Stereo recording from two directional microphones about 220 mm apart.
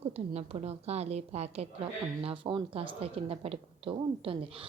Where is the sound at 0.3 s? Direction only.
30° right (ahead or behind).